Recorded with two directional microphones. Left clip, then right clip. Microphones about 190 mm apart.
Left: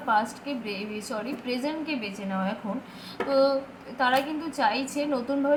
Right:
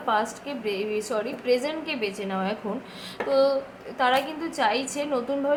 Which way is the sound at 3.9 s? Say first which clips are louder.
Right 1 dB; 15° right (ahead or behind).